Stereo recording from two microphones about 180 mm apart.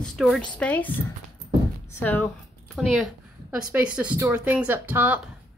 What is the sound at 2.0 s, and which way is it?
Speech, 10° left (ahead or behind).